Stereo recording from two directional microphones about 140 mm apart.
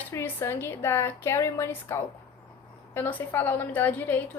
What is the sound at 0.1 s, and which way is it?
A woman's voice, 20° left (ahead or behind).